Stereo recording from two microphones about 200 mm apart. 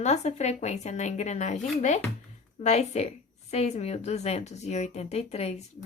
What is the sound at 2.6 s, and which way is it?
A woman's voice, 35° left (ahead or behind).